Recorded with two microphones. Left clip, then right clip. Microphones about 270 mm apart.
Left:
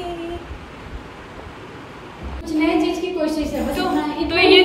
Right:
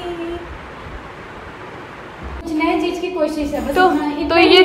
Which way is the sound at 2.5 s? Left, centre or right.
Centre.